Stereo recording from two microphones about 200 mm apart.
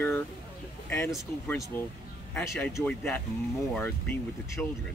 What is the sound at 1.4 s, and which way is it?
Speech, 15° left (ahead or behind).